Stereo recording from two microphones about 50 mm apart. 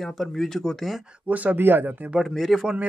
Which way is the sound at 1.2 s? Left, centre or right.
Right.